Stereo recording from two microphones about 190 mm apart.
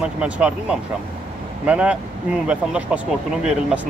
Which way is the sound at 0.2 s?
5° right (ahead or behind).